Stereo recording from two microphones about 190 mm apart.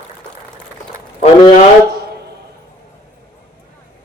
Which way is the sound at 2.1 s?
60° right (ahead or behind).